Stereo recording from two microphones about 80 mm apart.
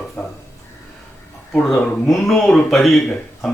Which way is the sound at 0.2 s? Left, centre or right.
Left.